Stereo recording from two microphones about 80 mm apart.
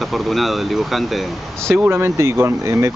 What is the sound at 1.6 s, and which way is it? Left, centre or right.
Speech, right.